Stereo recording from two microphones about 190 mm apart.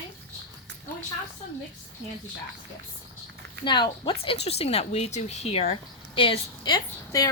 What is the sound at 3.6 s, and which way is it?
A woman's voice, 25° left (ahead or behind).